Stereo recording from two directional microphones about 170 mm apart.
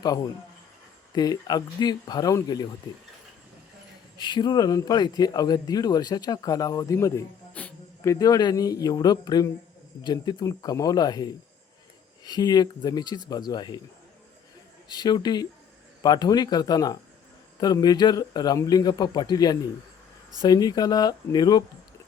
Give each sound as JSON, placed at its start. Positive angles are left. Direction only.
{"t": 1.1, "sound": "speech", "side_deg": 25}
{"t": 4.2, "sound": "speech", "side_deg": 25}
{"t": 7.5, "sound": "insect", "side_deg": 10}
{"t": 8.1, "sound": "speech", "side_deg": 20}
{"t": 14.8, "sound": "speech", "side_deg": 25}